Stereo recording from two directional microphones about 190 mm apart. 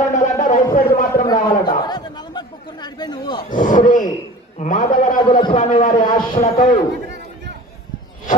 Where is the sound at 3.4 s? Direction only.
40° left (ahead or behind).